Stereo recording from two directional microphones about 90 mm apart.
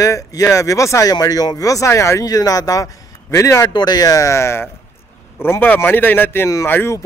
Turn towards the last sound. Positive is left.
turn(degrees=30)  # may be behind; listen again after turning